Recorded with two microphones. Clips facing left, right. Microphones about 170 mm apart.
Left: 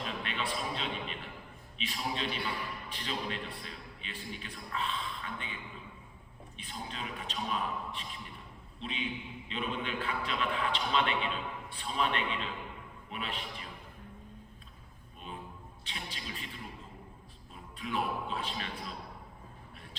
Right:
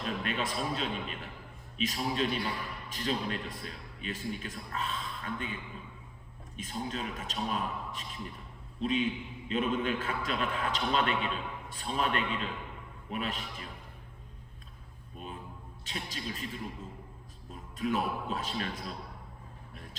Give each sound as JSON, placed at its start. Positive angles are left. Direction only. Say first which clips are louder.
{"t": 0.0, "sound": "music", "louder": "right 3 dB", "side_deg": -45}
{"t": 1.8, "sound": "a man's voice", "louder": "right 5 dB", "side_deg": -45}
{"t": 6.6, "sound": "a man's voice", "louder": "right 6 dB", "side_deg": -45}
{"t": 15.8, "sound": "a man's voice", "louder": "right 5 dB", "side_deg": -45}